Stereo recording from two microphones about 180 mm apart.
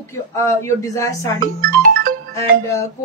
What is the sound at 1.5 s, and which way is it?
Music, 50° right (ahead or behind).